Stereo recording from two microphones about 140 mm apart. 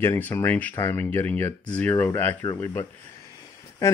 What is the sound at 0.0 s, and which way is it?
Speech, 20° left (ahead or behind).